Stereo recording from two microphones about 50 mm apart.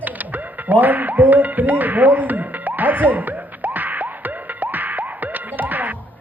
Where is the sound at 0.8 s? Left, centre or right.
Right.